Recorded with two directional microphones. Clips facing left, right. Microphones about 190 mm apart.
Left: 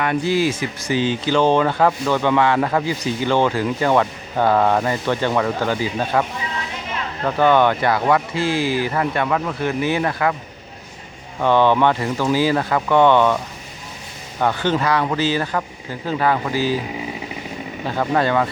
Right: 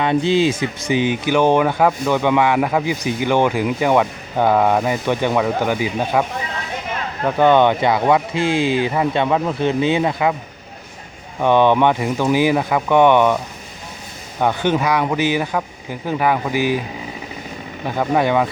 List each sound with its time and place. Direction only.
0.0 s speech: 20° right (ahead or behind)
7.3 s speech: 20° right (ahead or behind)
11.3 s speech: 15° right (ahead or behind)
17.8 s speech: 10° right (ahead or behind)